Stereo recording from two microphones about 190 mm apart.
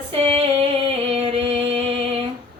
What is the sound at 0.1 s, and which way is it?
Singing, 30° right (ahead or behind).